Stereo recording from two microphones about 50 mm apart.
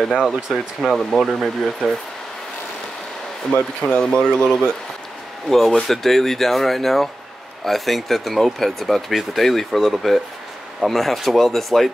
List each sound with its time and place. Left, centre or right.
0.2 s speech: centre
3.8 s speech: centre